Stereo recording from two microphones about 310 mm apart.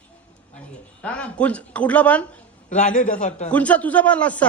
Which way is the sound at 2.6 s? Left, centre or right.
Left.